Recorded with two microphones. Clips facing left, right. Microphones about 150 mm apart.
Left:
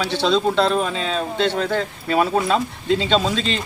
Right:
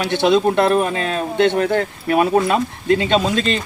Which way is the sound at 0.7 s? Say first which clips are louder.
Right 4 dB; 60° right (ahead or behind).